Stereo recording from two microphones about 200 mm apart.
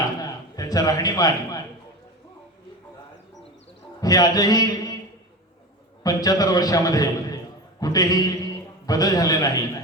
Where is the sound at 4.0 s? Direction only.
20° left (ahead or behind).